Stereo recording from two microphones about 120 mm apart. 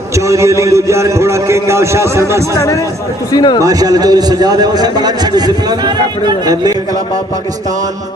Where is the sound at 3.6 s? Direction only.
30° right (ahead or behind).